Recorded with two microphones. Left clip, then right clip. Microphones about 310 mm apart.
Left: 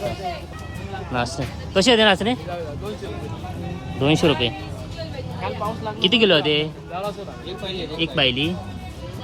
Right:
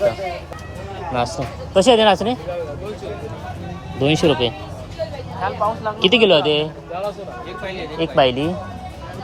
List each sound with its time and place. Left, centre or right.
1.1 s a man's voice: centre
1.8 s speech: left
4.0 s a man's voice: centre
5.5 s speech: left
7.8 s speech: centre